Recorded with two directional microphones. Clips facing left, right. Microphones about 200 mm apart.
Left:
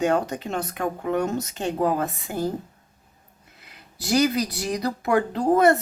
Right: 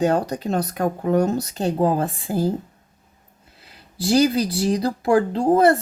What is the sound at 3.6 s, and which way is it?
Speech, 30° right (ahead or behind).